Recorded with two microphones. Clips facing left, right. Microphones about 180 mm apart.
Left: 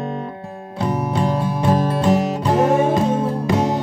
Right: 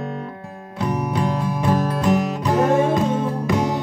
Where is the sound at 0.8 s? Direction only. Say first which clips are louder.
Left 2 dB; 30° left (ahead or behind).